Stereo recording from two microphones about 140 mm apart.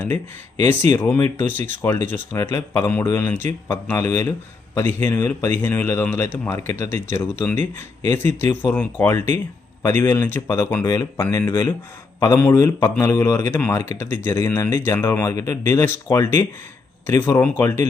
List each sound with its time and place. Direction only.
0.7 s speech: 15° left (ahead or behind)